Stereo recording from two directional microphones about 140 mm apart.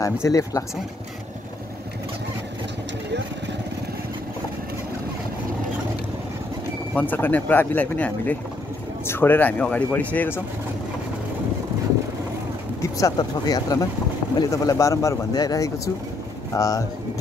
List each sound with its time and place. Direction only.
0.0 s speech: 25° left (ahead or behind)
7.0 s speech: 15° left (ahead or behind)
12.9 s speech: 25° left (ahead or behind)